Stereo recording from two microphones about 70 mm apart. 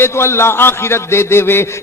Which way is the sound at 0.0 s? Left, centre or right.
Left.